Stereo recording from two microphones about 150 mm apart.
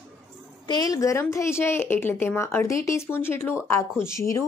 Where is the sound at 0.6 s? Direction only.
25° left (ahead or behind).